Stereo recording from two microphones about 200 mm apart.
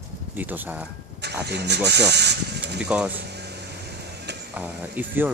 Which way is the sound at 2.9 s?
5° right (ahead or behind).